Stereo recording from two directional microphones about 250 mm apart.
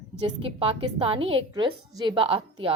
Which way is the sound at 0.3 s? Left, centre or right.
Right.